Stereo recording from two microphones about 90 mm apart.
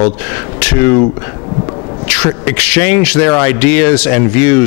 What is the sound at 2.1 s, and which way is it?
Speech, 15° left (ahead or behind).